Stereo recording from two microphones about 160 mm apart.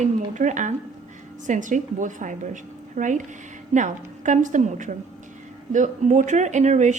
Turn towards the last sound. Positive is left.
turn(degrees=-45)  # may be behind; listen again after turning